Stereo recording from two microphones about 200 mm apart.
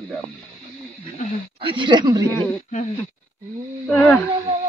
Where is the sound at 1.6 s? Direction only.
25° right (ahead or behind).